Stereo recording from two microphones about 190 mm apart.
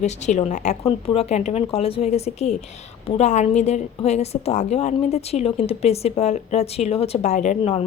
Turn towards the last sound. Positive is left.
turn(degrees=35)  # may be behind; listen again after turning